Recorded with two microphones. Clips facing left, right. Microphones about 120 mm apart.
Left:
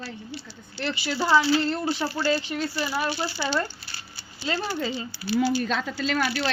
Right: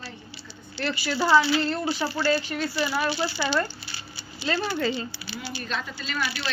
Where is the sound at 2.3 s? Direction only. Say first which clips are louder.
Right 1 dB; 20° left (ahead or behind).